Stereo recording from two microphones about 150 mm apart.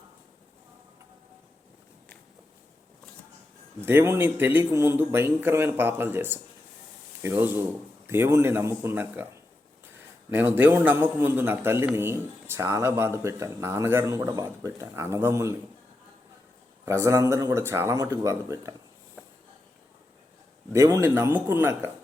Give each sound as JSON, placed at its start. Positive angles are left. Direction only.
{"t": 3.8, "sound": "a man's voice", "side_deg": -15}
{"t": 16.8, "sound": "speech", "side_deg": -20}
{"t": 20.7, "sound": "a man's voice", "side_deg": -20}